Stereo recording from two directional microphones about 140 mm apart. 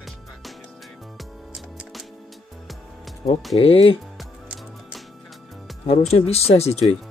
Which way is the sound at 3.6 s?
40° left (ahead or behind).